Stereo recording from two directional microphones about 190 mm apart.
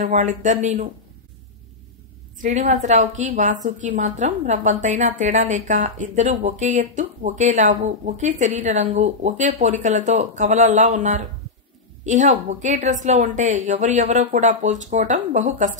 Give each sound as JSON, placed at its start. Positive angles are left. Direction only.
{"t": 0.0, "sound": "a woman's voice", "side_deg": -40}
{"t": 2.4, "sound": "a woman's voice", "side_deg": -40}